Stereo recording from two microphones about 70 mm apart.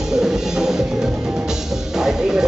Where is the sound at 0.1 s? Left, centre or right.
Centre.